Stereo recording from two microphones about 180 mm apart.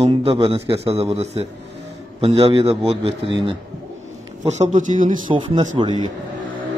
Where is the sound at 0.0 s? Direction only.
35° right (ahead or behind).